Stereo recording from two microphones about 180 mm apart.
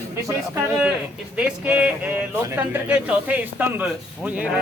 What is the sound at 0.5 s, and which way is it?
Speech, 5° right (ahead or behind).